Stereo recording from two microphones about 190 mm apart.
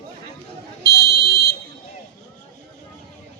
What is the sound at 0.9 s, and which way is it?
Buzzer, 55° left (ahead or behind).